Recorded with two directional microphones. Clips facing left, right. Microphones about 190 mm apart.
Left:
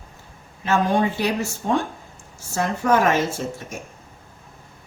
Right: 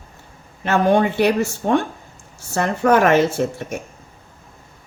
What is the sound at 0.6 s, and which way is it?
Speech, 60° right (ahead or behind).